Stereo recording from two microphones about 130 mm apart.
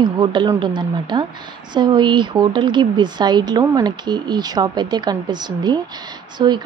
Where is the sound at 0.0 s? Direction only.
35° right (ahead or behind).